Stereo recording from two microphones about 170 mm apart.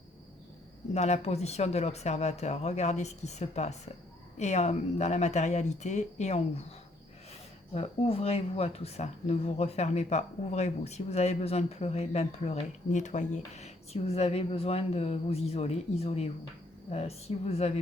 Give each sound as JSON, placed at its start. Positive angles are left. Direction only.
{"t": 0.9, "sound": "speech", "side_deg": 40}
{"t": 7.7, "sound": "speech", "side_deg": 35}